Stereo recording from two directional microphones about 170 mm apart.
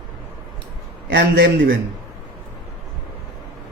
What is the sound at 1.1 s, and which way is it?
Speech, 90° right.